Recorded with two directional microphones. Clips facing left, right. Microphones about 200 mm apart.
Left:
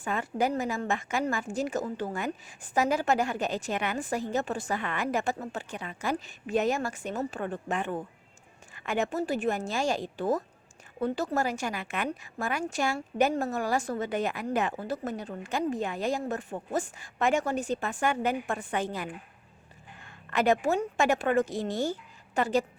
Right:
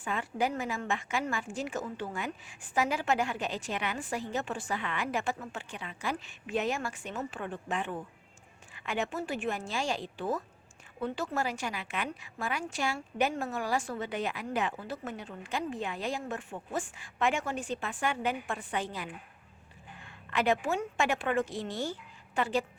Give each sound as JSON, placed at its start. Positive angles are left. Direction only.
{"t": 0.0, "sound": "a woman's voice", "side_deg": 45}